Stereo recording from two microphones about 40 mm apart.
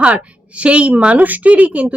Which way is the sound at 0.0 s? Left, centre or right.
Right.